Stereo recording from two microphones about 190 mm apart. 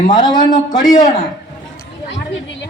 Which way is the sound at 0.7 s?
20° left (ahead or behind).